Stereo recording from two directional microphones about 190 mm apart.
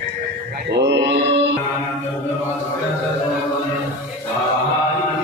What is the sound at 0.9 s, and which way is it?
Mantra, 70° right (ahead or behind).